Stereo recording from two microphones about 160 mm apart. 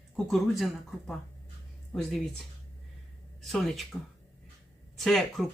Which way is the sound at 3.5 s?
Centre (ahead or behind).